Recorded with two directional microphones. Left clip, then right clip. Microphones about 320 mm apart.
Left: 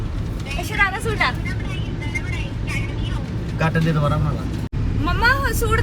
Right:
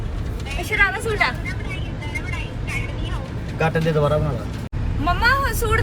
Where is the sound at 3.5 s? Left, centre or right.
Centre.